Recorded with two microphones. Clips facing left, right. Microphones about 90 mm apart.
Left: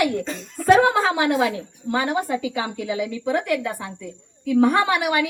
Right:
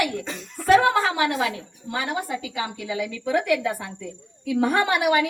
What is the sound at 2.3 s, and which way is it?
Speech, 50° left (ahead or behind).